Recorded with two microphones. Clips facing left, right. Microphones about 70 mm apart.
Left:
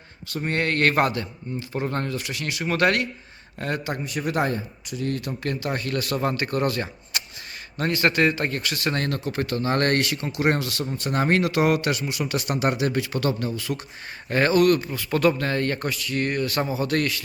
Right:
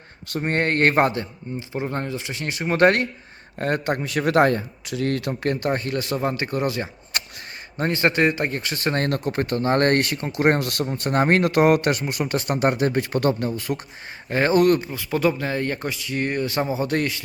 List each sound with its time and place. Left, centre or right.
0.3 s a man's voice: right
4.0 s a man's voice: right
5.3 s speech: right
5.9 s speech: right
7.1 s a sound: right
7.8 s speech: right
14.3 s speech: centre
14.5 s speech: right
14.8 s speech: centre